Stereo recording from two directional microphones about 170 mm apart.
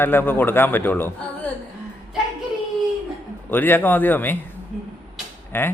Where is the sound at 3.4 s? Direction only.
10° left (ahead or behind).